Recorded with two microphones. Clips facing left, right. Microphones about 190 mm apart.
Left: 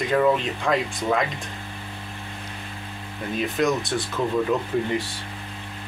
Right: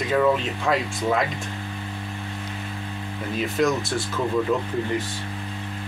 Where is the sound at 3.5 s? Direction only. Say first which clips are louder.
Right 1 dB; centre (ahead or behind).